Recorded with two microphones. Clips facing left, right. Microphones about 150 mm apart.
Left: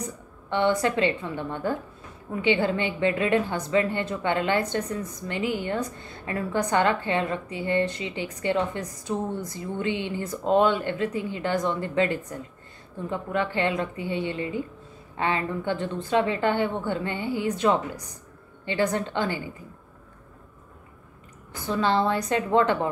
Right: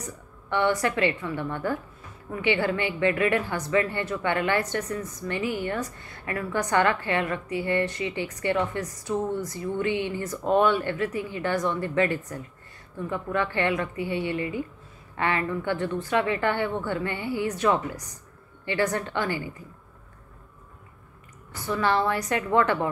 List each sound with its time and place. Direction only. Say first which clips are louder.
0.0 s a woman's voice: left 4 dB; 20° left (ahead or behind)
21.6 s a woman's voice: left 1 dB; 20° left (ahead or behind)